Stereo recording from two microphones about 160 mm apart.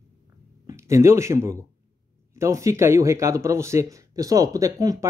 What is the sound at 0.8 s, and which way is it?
Speech, 20° right (ahead or behind).